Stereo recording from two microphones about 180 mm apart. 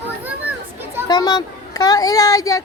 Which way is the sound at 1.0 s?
25° left (ahead or behind).